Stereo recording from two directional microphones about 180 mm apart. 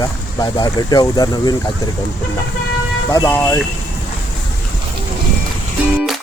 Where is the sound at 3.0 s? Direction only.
15° left (ahead or behind).